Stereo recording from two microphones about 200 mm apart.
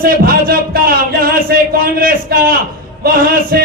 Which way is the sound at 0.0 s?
45° right (ahead or behind).